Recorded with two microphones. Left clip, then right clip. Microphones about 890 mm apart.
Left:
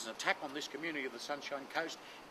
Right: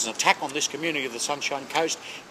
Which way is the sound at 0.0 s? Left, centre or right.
Right.